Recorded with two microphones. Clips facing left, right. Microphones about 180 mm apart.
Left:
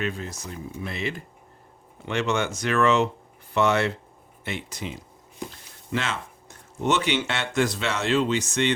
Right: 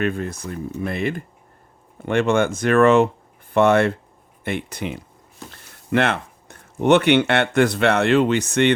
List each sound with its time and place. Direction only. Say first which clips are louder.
0.0 s speech: right 7 dB; 55° right (ahead or behind)